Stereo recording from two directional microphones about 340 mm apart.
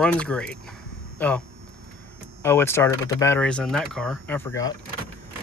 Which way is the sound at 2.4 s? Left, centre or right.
Centre.